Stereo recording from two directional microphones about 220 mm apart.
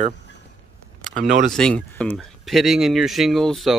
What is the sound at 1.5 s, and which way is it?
Speech, 5° left (ahead or behind).